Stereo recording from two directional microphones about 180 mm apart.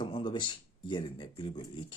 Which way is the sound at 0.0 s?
25° left (ahead or behind).